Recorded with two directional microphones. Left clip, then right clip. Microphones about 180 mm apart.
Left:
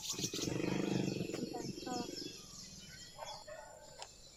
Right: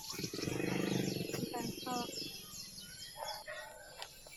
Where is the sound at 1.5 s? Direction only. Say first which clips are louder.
Right 3 dB; 35° right (ahead or behind).